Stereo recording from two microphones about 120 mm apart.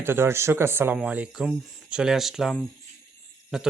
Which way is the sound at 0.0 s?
20° right (ahead or behind).